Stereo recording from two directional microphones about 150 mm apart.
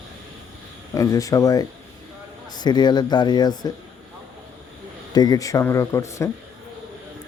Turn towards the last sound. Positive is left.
turn(degrees=20)  # may be behind; listen again after turning